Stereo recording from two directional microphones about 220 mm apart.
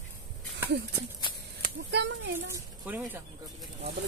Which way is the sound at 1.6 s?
50° right (ahead or behind).